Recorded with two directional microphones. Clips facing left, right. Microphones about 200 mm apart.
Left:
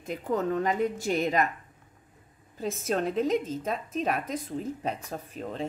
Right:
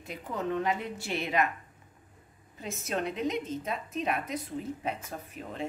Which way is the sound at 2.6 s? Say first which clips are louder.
Left 5 dB; 40° left (ahead or behind).